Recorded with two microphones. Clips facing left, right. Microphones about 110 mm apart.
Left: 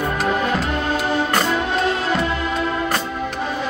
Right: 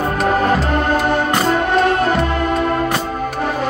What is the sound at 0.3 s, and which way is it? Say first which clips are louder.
Music: right 7 dB; 45° right (ahead or behind).